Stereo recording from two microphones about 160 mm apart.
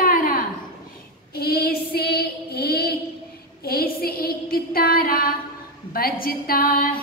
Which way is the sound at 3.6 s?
70° left (ahead or behind).